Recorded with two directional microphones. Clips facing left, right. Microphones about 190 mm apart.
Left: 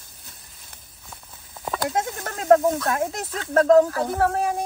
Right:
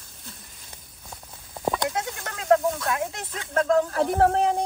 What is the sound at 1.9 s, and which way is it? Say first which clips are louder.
Snake: left 4 dB; 45° left (ahead or behind).